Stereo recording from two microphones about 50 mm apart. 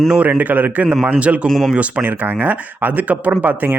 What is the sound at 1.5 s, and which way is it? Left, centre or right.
Speech, centre.